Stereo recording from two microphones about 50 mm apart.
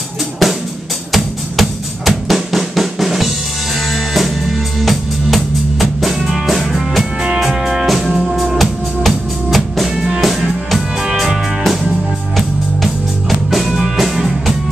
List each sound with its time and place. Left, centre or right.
0.4 s music: centre
1.1 s drum: centre
7.2 s music: centre